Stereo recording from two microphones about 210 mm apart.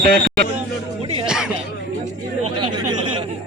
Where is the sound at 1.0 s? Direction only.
25° right (ahead or behind).